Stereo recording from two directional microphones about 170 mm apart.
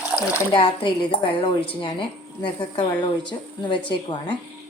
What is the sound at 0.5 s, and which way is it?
A woman's voice, 30° left (ahead or behind).